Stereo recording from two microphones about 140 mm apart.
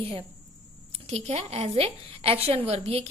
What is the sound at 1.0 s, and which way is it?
A woman's voice, 50° right (ahead or behind).